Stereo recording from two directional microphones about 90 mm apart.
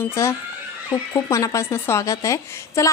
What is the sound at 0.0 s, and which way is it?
A woman's voice, 30° left (ahead or behind).